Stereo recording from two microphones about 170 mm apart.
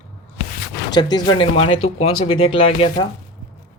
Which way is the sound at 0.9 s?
25° left (ahead or behind).